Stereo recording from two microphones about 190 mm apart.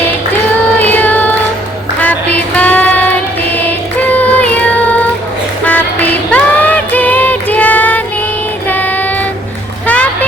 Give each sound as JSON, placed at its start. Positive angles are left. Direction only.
{"t": 0.8, "sound": "music", "side_deg": 10}
{"t": 8.7, "sound": "child singing", "side_deg": 10}
{"t": 9.8, "sound": "music", "side_deg": 5}